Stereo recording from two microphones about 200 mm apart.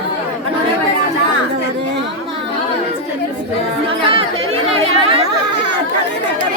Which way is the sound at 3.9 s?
25° right (ahead or behind).